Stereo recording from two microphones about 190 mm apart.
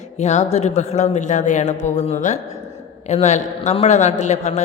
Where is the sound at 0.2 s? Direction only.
35° left (ahead or behind).